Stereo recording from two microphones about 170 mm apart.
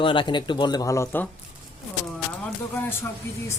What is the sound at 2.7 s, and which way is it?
Speech, 15° left (ahead or behind).